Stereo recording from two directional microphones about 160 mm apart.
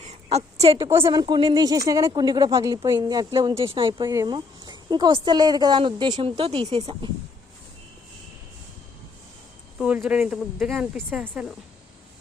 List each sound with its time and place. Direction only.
0.1 s a sound: 40° right (ahead or behind)
0.8 s a woman's voice: 15° right (ahead or behind)
1.2 s speech: 25° right (ahead or behind)
9.7 s speech: 5° right (ahead or behind)